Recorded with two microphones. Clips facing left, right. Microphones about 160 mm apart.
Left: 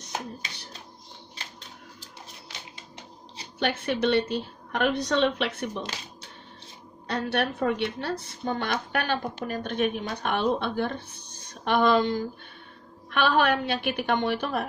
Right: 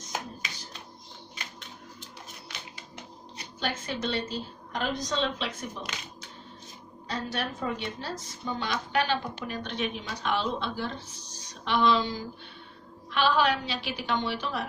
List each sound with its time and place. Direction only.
0.4 s a sound: 30° left (ahead or behind)
3.5 s a woman's voice: 65° left (ahead or behind)
7.1 s a woman's voice: 65° left (ahead or behind)